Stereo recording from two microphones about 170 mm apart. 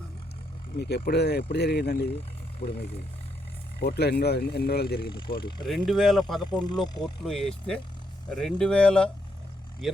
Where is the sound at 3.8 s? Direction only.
75° left (ahead or behind).